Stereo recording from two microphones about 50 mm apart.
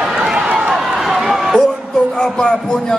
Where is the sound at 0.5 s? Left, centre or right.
Centre.